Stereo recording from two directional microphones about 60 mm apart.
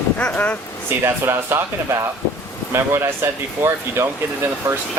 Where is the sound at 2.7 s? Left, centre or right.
Right.